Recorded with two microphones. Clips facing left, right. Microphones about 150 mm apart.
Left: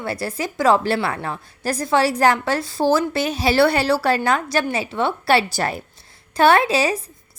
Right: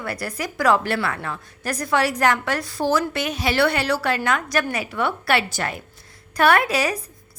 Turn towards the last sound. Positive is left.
turn(degrees=25)  # may be behind; listen again after turning